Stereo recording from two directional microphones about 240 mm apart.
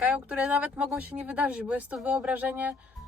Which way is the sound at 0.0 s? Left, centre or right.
Centre.